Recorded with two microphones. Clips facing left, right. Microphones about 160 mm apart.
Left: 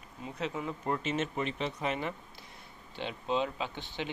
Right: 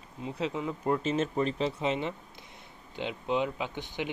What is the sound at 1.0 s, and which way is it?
Speech, 35° right (ahead or behind).